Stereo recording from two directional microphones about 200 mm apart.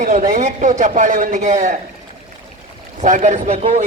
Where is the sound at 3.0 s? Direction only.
40° right (ahead or behind).